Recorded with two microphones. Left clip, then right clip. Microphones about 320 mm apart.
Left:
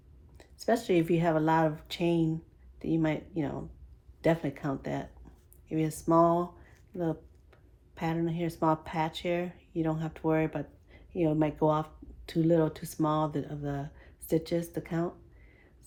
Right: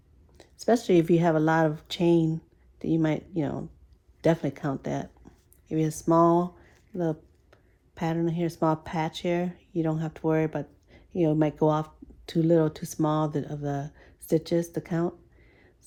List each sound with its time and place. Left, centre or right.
0.3 s speech: right